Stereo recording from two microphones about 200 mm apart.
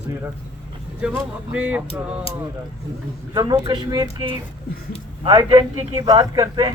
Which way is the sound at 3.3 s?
20° right (ahead or behind).